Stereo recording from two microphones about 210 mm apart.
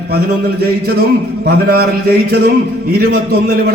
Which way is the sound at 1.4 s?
50° right (ahead or behind).